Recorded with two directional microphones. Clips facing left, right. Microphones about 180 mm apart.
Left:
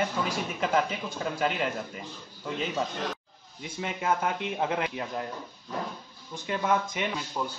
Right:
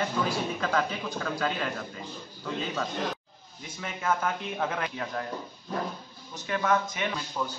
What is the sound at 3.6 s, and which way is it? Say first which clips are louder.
Speech: left 3 dB; 25° left (ahead or behind).